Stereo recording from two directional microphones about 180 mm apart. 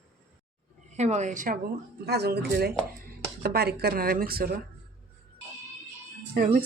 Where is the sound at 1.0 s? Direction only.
40° right (ahead or behind).